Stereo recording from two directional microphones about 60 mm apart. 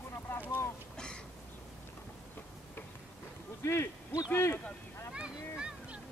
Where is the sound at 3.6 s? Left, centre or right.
Left.